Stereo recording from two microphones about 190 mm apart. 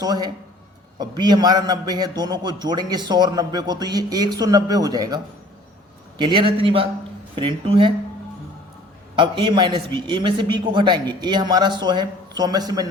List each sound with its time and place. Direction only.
0.0 s a man's voice: 20° right (ahead or behind)
9.1 s a man's voice: 25° right (ahead or behind)